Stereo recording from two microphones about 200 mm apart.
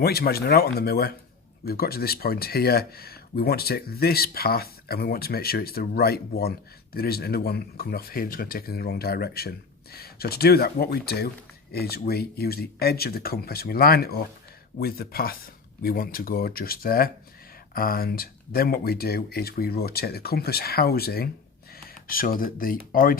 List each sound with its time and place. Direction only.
0.0 s speech: 50° left (ahead or behind)